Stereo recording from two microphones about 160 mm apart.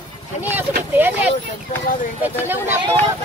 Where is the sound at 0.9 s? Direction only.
10° right (ahead or behind).